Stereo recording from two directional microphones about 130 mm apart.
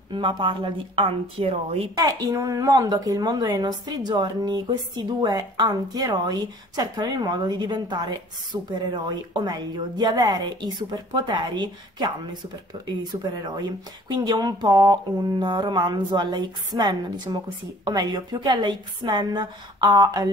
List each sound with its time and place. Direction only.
0.1 s speech: 35° right (ahead or behind)
2.0 s a woman's voice: 30° right (ahead or behind)
8.5 s a woman's voice: 25° right (ahead or behind)